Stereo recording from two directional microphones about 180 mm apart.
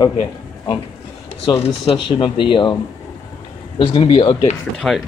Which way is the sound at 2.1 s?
25° left (ahead or behind).